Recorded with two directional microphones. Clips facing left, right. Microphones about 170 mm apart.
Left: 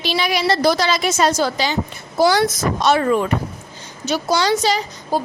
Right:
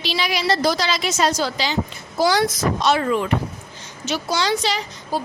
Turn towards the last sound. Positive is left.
turn(degrees=40)  # may be behind; listen again after turning